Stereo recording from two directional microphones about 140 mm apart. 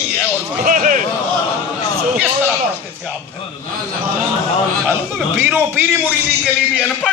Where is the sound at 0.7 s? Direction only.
70° right (ahead or behind).